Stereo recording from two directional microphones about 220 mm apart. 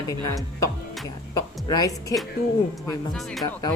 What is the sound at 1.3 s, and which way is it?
Speech, 15° left (ahead or behind).